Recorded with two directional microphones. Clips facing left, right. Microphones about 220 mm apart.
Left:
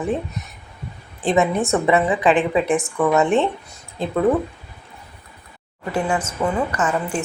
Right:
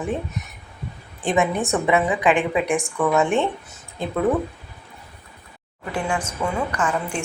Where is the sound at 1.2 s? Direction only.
Centre (ahead or behind).